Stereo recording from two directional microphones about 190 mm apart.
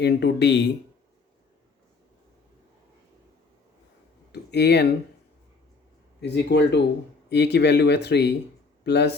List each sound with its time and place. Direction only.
0.0 s speech: 60° left (ahead or behind)
4.3 s speech: 60° left (ahead or behind)
6.2 s speech: 65° left (ahead or behind)